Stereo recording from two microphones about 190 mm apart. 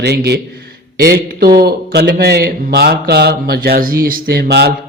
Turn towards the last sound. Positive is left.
turn(degrees=-55)  # may be behind; listen again after turning